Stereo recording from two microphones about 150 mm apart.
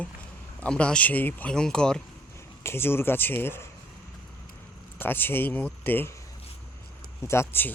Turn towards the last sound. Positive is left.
turn(degrees=15)  # may be behind; listen again after turning